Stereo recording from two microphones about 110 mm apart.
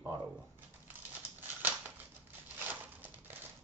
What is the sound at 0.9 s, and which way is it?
Crumpling, 15° right (ahead or behind).